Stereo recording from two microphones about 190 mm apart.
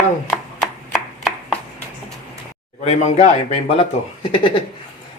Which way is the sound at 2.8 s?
35° left (ahead or behind).